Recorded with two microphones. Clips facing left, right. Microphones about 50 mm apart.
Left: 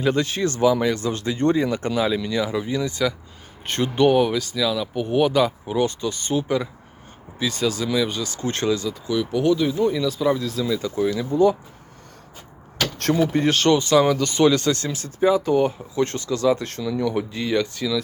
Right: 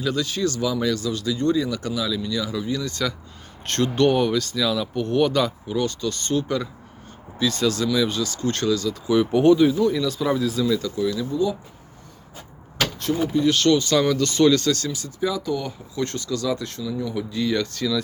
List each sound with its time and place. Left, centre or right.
0.0 s speech: left
2.4 s speech: left
2.9 s speech: centre
9.1 s speech: right
9.9 s speech: centre
10.8 s speech: left
13.0 s speech: left
13.4 s speech: left
16.8 s speech: left
17.2 s speech: left
17.6 s speech: centre